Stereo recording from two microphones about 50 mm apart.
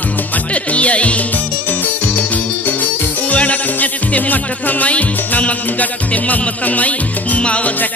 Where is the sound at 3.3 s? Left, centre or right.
Left.